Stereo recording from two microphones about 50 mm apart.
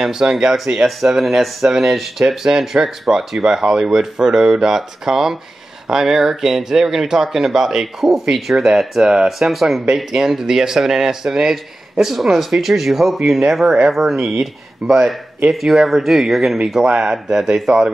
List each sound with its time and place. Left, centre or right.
0.0 s speech: centre